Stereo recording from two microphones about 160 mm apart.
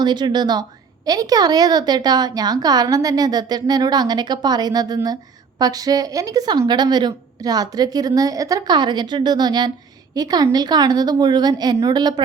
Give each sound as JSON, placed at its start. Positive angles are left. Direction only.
{"t": 0.0, "sound": "a woman's voice", "side_deg": -30}